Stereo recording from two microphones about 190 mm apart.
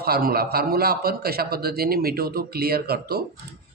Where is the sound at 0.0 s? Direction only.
55° right (ahead or behind).